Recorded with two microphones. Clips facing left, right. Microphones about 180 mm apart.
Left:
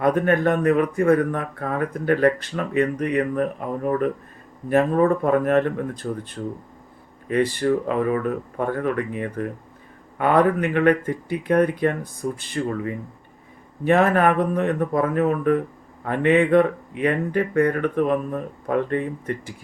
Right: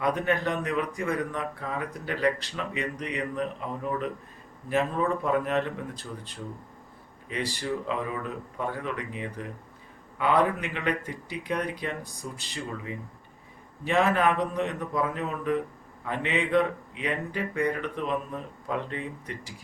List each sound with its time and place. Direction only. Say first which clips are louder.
0.0 s speech: left 8 dB; 50° left (ahead or behind)